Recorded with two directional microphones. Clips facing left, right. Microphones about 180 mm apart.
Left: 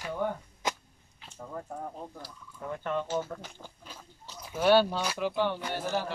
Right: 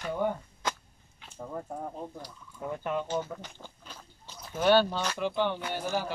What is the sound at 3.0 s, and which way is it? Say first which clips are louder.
Speech: even; 5° left (ahead or behind).